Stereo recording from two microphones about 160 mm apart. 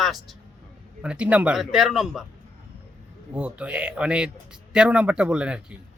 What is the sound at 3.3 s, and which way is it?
Speech, 10° right (ahead or behind).